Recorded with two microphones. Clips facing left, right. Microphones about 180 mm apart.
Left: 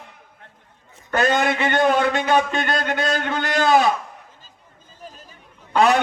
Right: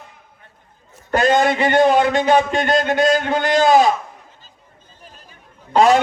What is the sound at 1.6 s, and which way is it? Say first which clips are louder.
A man's voice: right 4 dB; 20° right (ahead or behind).